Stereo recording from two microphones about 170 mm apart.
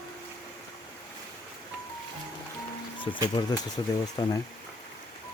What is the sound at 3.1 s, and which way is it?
Speech, 25° left (ahead or behind).